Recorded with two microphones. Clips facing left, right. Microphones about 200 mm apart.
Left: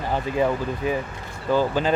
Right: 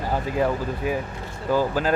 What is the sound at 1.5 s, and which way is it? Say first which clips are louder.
Speech: left 1 dB; 5° right (ahead or behind).